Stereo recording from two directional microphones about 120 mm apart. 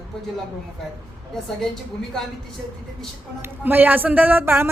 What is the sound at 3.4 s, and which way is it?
Speech, 15° right (ahead or behind).